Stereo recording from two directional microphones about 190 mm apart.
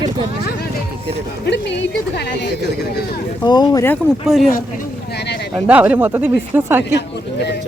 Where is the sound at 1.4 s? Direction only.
65° left (ahead or behind).